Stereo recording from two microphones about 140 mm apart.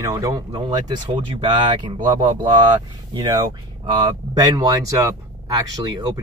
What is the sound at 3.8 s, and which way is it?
Speech, 25° right (ahead or behind).